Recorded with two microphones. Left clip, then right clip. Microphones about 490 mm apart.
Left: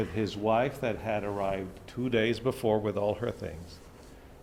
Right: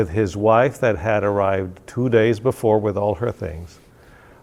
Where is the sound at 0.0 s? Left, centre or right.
Right.